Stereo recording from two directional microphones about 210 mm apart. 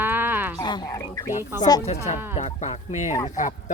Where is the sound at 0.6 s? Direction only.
20° left (ahead or behind).